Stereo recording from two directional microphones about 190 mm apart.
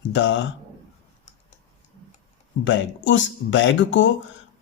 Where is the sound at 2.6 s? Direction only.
75° left (ahead or behind).